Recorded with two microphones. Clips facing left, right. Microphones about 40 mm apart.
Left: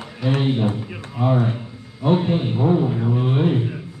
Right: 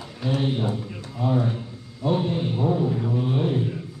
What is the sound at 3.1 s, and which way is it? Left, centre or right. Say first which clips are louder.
Speech: left 4 dB; left.